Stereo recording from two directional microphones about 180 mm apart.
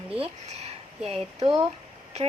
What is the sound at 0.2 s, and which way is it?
Speech, 35° right (ahead or behind).